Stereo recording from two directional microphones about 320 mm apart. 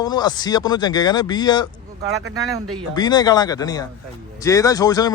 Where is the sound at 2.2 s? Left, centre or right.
Right.